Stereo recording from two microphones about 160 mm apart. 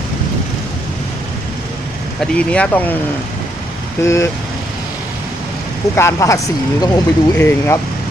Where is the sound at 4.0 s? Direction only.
15° left (ahead or behind).